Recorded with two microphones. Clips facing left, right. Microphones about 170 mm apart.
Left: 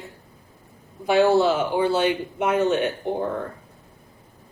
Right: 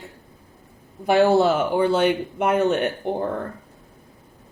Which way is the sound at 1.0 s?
50° right (ahead or behind).